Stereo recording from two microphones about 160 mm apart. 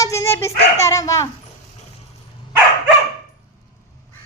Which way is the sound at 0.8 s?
20° left (ahead or behind).